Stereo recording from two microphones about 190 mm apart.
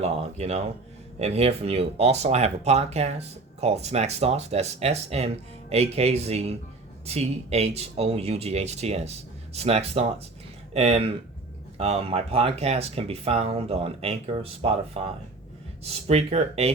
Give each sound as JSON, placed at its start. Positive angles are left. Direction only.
{"t": 0.0, "sound": "speech", "side_deg": -35}